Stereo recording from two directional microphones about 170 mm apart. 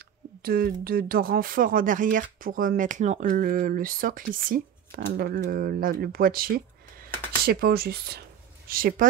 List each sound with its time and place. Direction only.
0.4 s speech: 60° right (ahead or behind)